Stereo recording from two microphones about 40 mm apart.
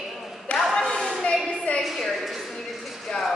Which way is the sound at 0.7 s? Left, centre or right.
Centre.